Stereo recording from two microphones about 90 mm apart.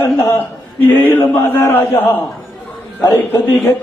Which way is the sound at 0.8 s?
20° left (ahead or behind).